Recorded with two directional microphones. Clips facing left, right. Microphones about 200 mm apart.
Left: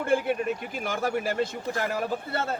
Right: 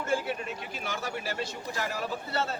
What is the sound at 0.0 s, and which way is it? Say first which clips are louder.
A man's voice: left 6 dB; 55° left (ahead or behind).